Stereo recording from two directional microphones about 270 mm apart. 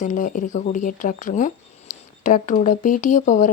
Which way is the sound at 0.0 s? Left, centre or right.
Left.